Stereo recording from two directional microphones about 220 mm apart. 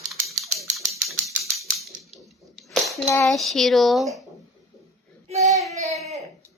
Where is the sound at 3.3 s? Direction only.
Centre (ahead or behind).